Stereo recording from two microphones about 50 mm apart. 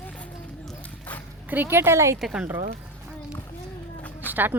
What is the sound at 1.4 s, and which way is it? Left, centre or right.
Speech, right.